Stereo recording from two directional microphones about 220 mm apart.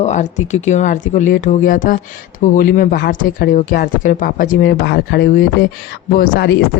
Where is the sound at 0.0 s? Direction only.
35° left (ahead or behind).